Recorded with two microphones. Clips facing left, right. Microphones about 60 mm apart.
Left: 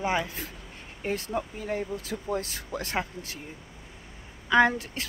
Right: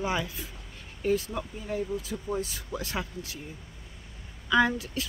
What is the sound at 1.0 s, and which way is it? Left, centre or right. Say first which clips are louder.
Speech: right 2 dB; left.